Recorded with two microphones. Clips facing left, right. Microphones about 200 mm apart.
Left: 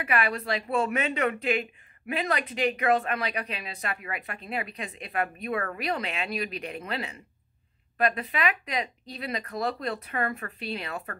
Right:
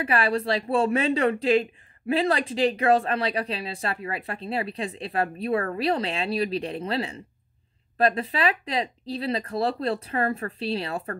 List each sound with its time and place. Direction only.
0.0 s a woman's voice: 30° right (ahead or behind)